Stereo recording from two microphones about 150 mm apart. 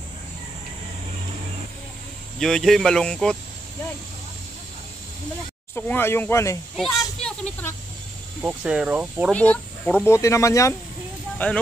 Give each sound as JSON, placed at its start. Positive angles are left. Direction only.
{"t": 2.4, "sound": "speech", "side_deg": 0}
{"t": 5.8, "sound": "speech", "side_deg": 15}
{"t": 6.8, "sound": "a sound", "side_deg": 5}
{"t": 8.4, "sound": "speech", "side_deg": -5}
{"t": 9.3, "sound": "speech", "side_deg": 10}
{"t": 11.3, "sound": "speech", "side_deg": 10}